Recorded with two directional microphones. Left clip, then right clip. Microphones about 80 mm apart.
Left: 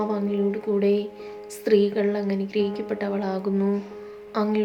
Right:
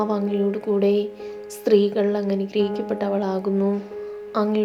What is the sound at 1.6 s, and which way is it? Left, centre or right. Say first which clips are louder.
A woman's voice: right 2 dB; right.